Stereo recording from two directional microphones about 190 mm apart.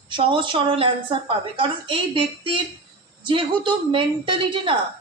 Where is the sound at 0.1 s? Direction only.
25° right (ahead or behind).